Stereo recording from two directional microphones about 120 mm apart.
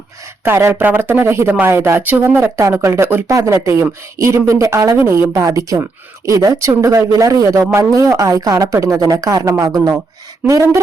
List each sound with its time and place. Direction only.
0.4 s speech: 20° right (ahead or behind)